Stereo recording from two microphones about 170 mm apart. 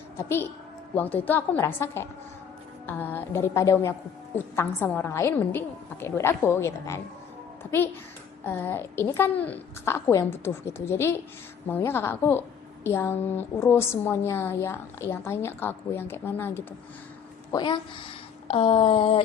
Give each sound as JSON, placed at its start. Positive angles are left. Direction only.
{"t": 0.2, "sound": "a woman's voice", "side_deg": 15}
{"t": 17.5, "sound": "speech", "side_deg": 25}
{"t": 18.4, "sound": "a sound", "side_deg": 35}